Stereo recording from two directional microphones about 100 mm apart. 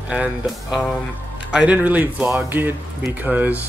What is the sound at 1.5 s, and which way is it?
Speech, 10° right (ahead or behind).